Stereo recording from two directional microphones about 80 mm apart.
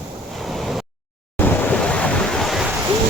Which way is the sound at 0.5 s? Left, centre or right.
Centre.